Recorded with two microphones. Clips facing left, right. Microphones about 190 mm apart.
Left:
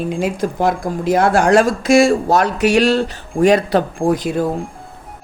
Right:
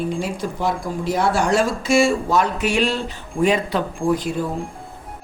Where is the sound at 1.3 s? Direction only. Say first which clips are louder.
Left 6 dB; 90° left.